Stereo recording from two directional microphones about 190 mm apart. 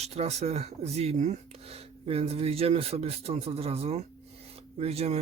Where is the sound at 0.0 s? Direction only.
35° right (ahead or behind).